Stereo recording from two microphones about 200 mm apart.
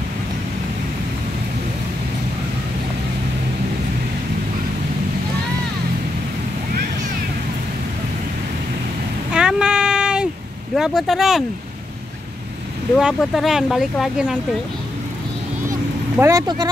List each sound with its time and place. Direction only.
9.3 s a sound: 5° right (ahead or behind)
10.8 s speech: centre (ahead or behind)
12.9 s speech: centre (ahead or behind)
15.7 s vehicle: 15° right (ahead or behind)